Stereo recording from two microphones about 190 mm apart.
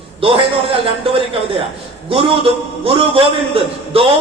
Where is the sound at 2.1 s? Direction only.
30° right (ahead or behind).